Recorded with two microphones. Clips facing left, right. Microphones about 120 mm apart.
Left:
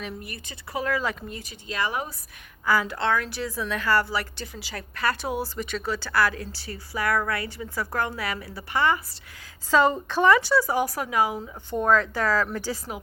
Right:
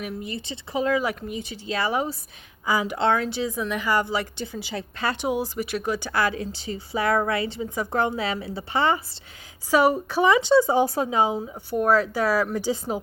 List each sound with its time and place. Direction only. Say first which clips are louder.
0.0 s speech: right 4 dB; 20° right (ahead or behind)
1.7 s speech: right 4 dB; 30° right (ahead or behind)
2.6 s a woman's voice: right 2 dB; 15° right (ahead or behind)
9.6 s speech: right 1 dB; 10° right (ahead or behind)
11.7 s a woman's voice: right 1 dB; 10° right (ahead or behind); by 13.0 s 25° right (ahead or behind)